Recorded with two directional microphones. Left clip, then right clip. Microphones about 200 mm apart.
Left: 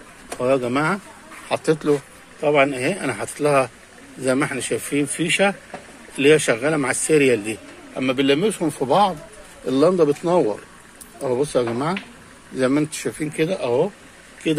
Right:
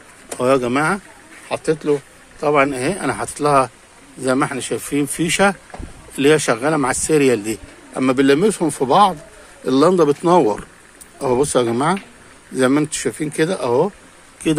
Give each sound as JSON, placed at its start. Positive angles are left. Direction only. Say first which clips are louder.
{"t": 0.4, "sound": "speech", "louder": "right 3 dB", "side_deg": -20}
{"t": 2.4, "sound": "speech", "louder": "right 2 dB", "side_deg": -10}
{"t": 5.1, "sound": "a man's voice", "louder": "right 3 dB", "side_deg": -20}
{"t": 13.6, "sound": "speech", "louder": "right 3 dB", "side_deg": -60}